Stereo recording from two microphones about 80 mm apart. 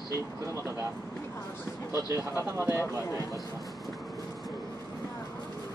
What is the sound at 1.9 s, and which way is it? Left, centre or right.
Speech, right.